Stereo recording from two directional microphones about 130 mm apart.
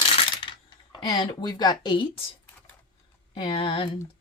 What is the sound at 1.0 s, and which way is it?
Speech, 30° left (ahead or behind).